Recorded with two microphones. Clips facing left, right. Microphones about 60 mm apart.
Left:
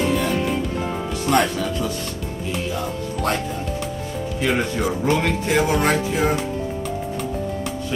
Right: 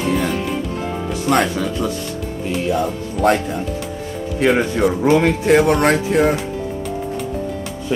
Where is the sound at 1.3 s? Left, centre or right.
Centre.